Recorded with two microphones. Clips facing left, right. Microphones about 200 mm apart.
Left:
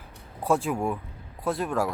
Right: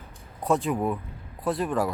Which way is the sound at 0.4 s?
Centre (ahead or behind).